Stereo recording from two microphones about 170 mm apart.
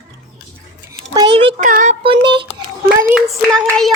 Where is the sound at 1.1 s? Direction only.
25° right (ahead or behind).